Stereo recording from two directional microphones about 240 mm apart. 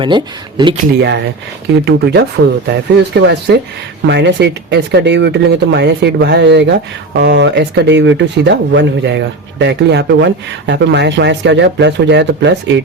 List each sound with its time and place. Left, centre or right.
0.0 s speech: centre
1.8 s speech: right